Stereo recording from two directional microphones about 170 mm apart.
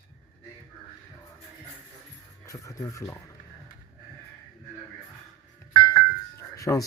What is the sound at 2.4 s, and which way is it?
Speech, 20° left (ahead or behind).